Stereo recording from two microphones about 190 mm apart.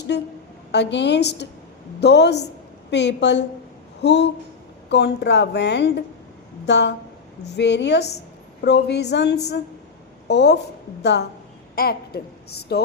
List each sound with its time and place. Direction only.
0.1 s a woman's voice: 60° left (ahead or behind)
11.7 s a woman's voice: 55° left (ahead or behind)